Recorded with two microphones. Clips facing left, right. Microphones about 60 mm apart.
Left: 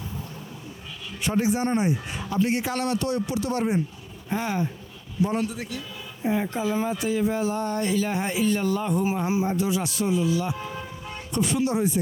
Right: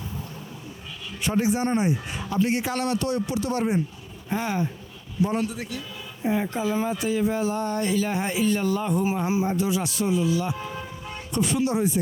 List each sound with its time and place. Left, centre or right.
0.9 s speech: right